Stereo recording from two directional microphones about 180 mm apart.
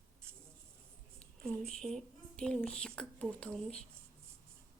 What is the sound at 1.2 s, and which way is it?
Speech, 5° left (ahead or behind).